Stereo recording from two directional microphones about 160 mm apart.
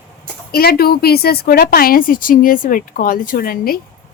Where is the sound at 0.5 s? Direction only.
75° left (ahead or behind).